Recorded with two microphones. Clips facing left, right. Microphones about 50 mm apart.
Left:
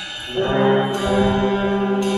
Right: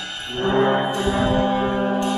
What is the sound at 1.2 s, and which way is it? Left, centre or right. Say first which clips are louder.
Music: left 1 dB; centre.